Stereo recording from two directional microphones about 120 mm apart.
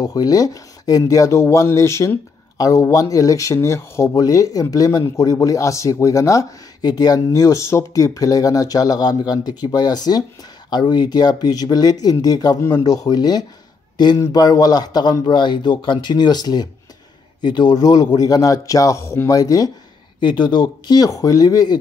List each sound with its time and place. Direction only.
0.0 s speech: 30° left (ahead or behind)